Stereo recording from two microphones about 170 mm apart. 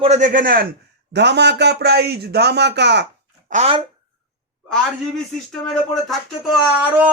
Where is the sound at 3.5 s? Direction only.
35° right (ahead or behind).